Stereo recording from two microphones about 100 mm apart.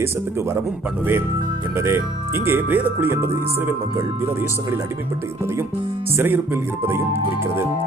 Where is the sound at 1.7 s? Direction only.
25° right (ahead or behind).